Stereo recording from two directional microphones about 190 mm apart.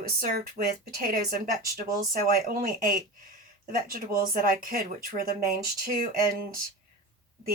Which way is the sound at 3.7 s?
50° right (ahead or behind).